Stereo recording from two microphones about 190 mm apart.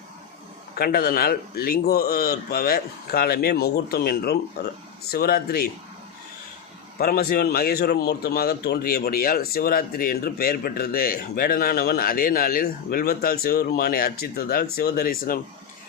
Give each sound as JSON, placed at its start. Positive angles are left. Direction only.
{"t": 0.8, "sound": "a man's voice", "side_deg": 50}
{"t": 7.0, "sound": "a man's voice", "side_deg": 50}